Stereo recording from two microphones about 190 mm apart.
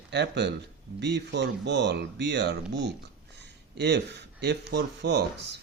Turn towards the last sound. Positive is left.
turn(degrees=-60)  # may be behind; listen again after turning